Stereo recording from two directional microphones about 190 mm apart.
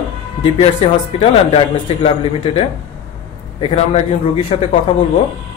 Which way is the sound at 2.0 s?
30° left (ahead or behind).